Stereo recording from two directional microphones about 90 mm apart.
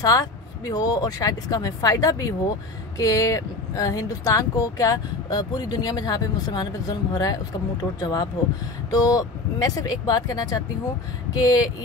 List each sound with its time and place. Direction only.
0.0 s speech: 45° left (ahead or behind)